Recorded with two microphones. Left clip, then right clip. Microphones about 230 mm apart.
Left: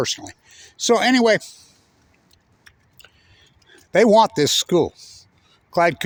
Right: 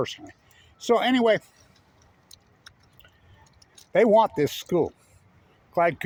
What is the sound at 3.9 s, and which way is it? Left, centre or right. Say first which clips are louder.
Speech: left 5 dB; left.